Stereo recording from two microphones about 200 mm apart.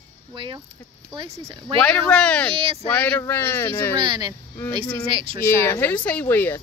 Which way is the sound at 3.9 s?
20° right (ahead or behind).